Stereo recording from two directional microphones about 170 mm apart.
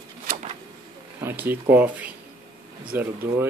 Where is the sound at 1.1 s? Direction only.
10° right (ahead or behind).